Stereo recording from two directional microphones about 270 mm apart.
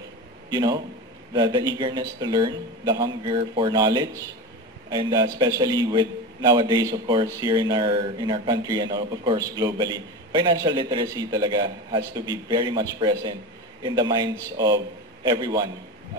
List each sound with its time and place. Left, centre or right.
1.3 s a man's voice: centre